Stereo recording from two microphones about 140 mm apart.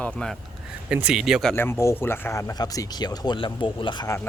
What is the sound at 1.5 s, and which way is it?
Speech, 15° left (ahead or behind).